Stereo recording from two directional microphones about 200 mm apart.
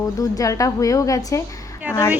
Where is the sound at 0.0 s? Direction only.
15° left (ahead or behind).